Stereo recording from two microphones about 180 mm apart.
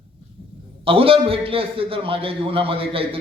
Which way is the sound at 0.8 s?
30° right (ahead or behind).